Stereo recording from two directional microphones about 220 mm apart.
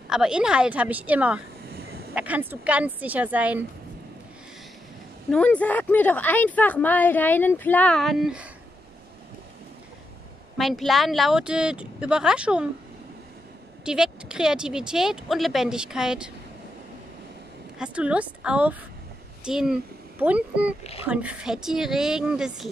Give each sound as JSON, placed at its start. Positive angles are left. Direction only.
{"t": 0.1, "sound": "speech", "side_deg": -5}
{"t": 1.7, "sound": "a sound", "side_deg": -45}
{"t": 2.1, "sound": "speech", "side_deg": -5}
{"t": 5.3, "sound": "speech", "side_deg": 5}
{"t": 10.6, "sound": "speech", "side_deg": 0}
{"t": 13.8, "sound": "speech", "side_deg": -5}
{"t": 17.7, "sound": "speech", "side_deg": -5}